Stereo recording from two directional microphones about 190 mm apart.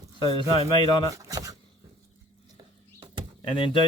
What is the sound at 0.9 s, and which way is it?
Speech, 20° left (ahead or behind).